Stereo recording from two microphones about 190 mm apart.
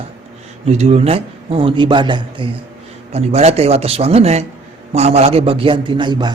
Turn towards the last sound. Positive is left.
turn(degrees=-25)  # may be behind; listen again after turning